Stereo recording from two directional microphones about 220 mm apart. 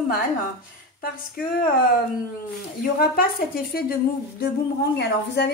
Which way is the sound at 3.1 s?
45° left (ahead or behind).